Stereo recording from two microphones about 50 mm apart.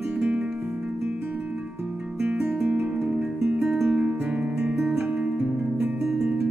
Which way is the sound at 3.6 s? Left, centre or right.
Centre.